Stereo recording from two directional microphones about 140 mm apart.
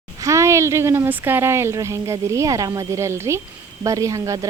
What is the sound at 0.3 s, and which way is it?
A woman's voice, 20° right (ahead or behind).